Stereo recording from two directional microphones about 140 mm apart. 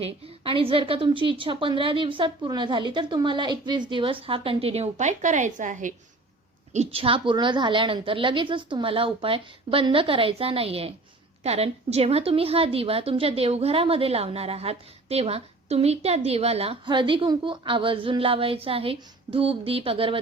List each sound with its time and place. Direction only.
0.0 s a woman's voice: 40° right (ahead or behind); by 5.9 s 65° right (ahead or behind)
6.7 s a woman's voice: 40° right (ahead or behind)